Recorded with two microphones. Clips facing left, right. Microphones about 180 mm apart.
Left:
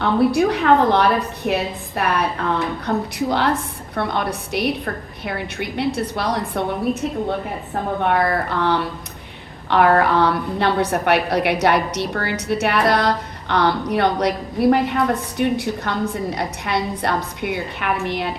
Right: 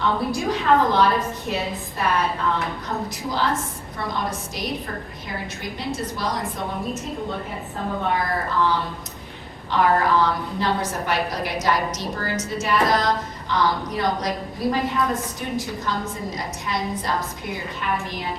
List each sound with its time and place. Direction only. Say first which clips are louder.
0.0 s a woman's voice: left 7 dB; 65° left (ahead or behind)
8.0 s a woman's voice: left 6 dB; 65° left (ahead or behind)